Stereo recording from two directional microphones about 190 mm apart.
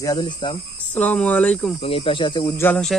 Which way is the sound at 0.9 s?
10° left (ahead or behind).